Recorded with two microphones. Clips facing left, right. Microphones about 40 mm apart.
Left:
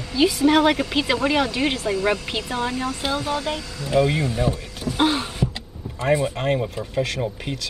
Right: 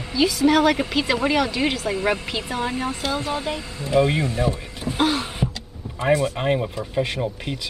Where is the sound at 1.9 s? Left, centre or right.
Centre.